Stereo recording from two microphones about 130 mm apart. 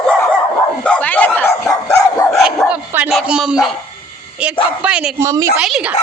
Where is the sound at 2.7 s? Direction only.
10° right (ahead or behind).